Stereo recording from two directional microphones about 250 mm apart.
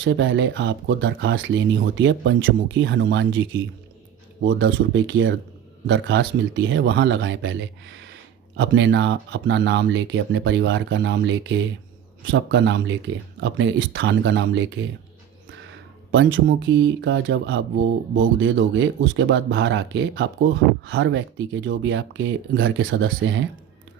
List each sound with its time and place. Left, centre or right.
0.0 s speech: right
16.1 s speech: right